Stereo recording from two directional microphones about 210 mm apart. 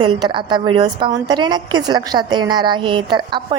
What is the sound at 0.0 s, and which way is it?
A woman's voice, 20° right (ahead or behind).